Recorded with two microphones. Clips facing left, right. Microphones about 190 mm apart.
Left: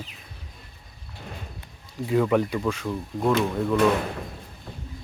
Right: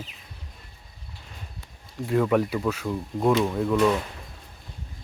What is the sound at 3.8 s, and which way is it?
Speech, 60° left (ahead or behind).